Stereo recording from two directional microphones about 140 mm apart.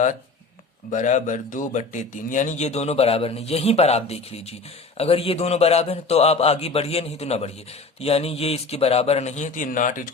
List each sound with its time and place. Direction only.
0.9 s speech: 60° left (ahead or behind)